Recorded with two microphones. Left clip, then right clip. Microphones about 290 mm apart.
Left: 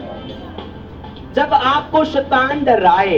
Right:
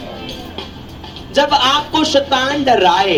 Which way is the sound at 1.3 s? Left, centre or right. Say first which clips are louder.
Right 1 dB; right.